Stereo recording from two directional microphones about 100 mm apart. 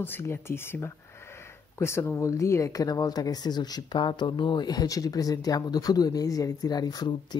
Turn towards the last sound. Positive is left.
turn(degrees=45)  # may be behind; listen again after turning